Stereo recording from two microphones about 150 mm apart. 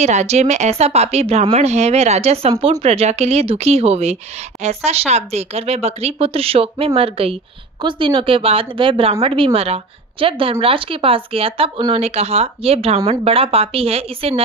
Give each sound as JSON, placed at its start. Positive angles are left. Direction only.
{"t": 0.0, "sound": "speech", "side_deg": -50}